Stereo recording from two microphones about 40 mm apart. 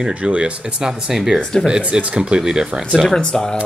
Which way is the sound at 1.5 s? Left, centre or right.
Left.